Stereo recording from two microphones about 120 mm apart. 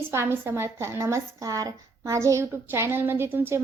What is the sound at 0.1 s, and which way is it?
Speech, 20° right (ahead or behind).